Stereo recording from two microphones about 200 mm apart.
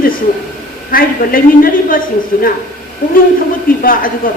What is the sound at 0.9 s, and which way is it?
A woman's voice, 45° left (ahead or behind).